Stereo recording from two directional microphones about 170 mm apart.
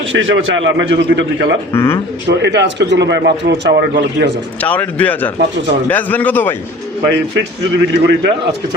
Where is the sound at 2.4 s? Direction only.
90° right.